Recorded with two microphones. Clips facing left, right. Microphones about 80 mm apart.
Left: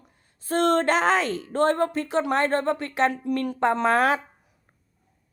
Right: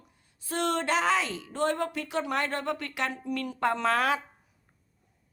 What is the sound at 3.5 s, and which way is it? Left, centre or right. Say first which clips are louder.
Speech: left 5 dB; left.